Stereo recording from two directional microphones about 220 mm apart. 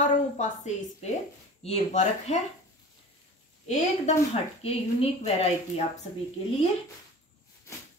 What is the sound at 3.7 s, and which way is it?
A woman's voice, 30° left (ahead or behind).